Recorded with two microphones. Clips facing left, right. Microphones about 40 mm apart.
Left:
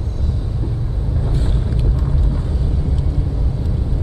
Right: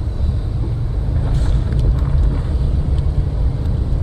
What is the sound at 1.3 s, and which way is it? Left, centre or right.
Vehicle, left.